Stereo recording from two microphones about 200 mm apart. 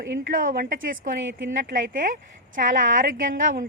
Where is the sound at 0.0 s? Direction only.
50° right (ahead or behind).